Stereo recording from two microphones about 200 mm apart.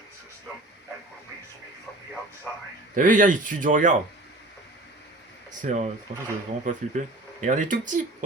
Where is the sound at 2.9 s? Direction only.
40° right (ahead or behind).